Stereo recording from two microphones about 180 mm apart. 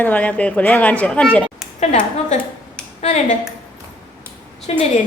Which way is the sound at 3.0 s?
40° left (ahead or behind).